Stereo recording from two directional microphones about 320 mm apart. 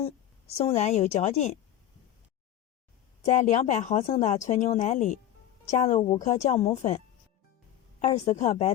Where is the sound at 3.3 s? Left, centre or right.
Left.